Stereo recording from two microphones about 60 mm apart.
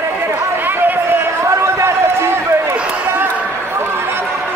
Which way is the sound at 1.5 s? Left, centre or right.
Right.